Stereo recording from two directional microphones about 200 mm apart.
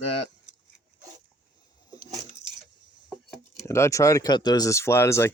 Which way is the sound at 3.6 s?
15° left (ahead or behind).